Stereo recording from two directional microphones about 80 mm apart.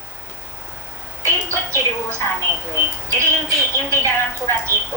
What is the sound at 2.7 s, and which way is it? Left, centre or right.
A woman's voice, right.